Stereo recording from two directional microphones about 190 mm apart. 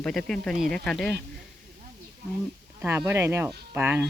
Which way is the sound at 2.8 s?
15° right (ahead or behind).